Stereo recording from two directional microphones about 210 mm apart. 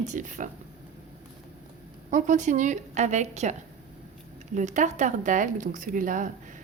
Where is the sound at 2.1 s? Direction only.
35° right (ahead or behind).